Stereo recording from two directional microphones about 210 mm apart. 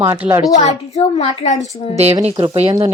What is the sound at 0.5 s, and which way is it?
A child's voice, 30° left (ahead or behind).